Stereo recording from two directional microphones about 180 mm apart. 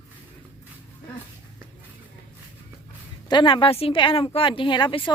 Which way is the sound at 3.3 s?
25° left (ahead or behind).